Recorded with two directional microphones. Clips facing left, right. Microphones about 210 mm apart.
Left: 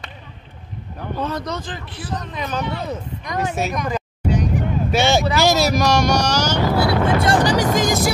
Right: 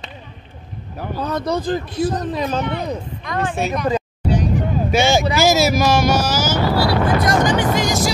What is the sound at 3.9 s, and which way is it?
Vehicle, 30° right (ahead or behind).